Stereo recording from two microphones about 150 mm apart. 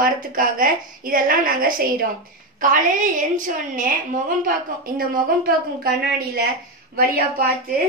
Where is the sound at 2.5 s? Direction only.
60° right (ahead or behind); by 7.5 s 80° right.